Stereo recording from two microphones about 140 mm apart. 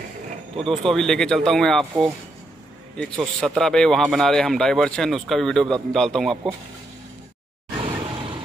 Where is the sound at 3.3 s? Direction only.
5° left (ahead or behind).